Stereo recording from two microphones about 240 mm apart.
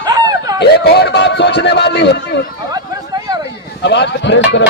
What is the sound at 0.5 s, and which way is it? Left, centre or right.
A man's voice, left.